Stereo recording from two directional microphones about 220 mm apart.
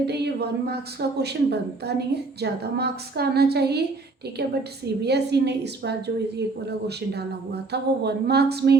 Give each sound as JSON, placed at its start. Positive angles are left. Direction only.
{"t": 0.0, "sound": "a woman's voice", "side_deg": -50}
{"t": 5.0, "sound": "a woman's voice", "side_deg": -50}